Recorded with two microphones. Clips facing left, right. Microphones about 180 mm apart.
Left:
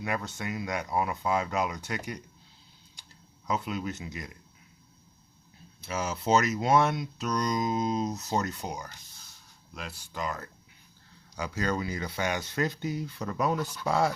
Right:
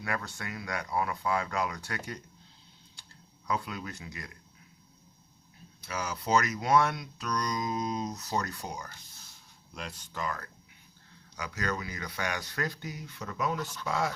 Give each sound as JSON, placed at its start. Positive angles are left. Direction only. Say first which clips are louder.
{"t": 0.0, "sound": "speech", "louder": "left 3 dB", "side_deg": 20}
{"t": 3.4, "sound": "speech", "louder": "left 3 dB", "side_deg": 20}
{"t": 5.8, "sound": "speech", "louder": "left 4 dB", "side_deg": 25}
{"t": 9.7, "sound": "speech", "louder": "left 1 dB", "side_deg": 5}